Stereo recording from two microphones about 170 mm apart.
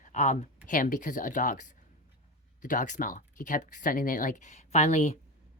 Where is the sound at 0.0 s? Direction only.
45° left (ahead or behind).